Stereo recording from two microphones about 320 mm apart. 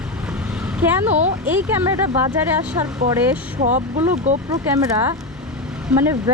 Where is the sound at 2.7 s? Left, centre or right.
Centre.